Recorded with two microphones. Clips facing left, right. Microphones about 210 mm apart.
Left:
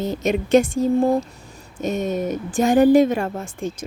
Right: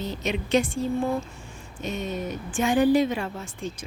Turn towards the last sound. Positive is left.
turn(degrees=45)  # may be behind; listen again after turning